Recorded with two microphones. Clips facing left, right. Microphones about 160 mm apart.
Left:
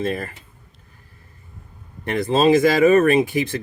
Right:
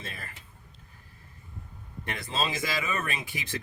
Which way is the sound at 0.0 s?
55° left (ahead or behind).